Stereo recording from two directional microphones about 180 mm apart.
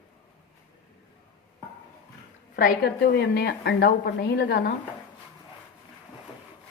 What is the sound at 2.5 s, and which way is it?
A woman's voice, 60° left (ahead or behind).